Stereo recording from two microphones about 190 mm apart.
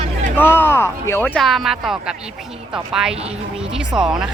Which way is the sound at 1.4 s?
Centre (ahead or behind).